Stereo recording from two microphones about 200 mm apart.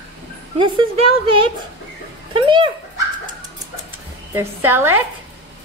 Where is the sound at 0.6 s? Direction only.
25° right (ahead or behind).